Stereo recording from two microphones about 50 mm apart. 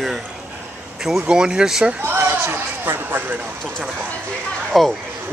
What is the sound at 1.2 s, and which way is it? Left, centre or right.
Speech, centre.